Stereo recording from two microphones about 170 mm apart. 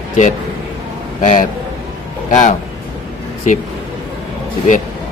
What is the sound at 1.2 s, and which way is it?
A man's voice, 45° left (ahead or behind).